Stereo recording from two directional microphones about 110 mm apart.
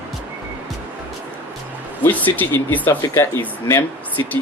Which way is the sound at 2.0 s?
20° left (ahead or behind).